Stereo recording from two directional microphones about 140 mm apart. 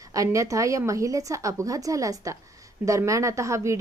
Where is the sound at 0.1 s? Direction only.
25° right (ahead or behind).